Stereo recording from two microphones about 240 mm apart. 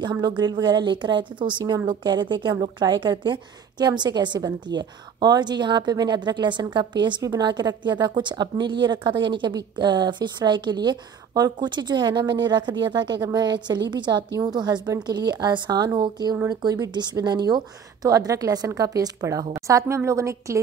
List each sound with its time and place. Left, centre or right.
0.0 s a woman's voice: centre